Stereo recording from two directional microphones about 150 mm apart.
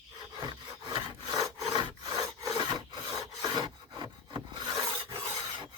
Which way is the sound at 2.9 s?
25° right (ahead or behind).